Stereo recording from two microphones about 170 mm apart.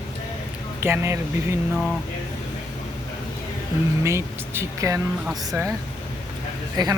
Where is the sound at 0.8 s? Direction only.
15° right (ahead or behind).